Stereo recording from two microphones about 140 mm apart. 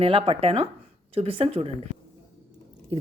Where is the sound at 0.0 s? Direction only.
40° right (ahead or behind).